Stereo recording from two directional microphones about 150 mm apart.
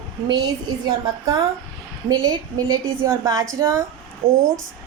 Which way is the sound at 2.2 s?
25° right (ahead or behind).